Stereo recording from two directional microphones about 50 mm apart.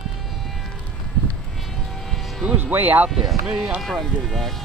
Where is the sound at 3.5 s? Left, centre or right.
Centre.